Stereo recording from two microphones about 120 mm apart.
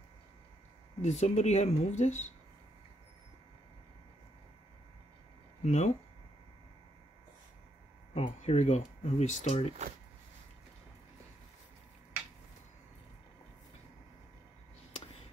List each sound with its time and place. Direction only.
1.0 s speech: 65° left (ahead or behind)
5.7 s speech: 75° left (ahead or behind)
8.1 s speech: 65° left (ahead or behind)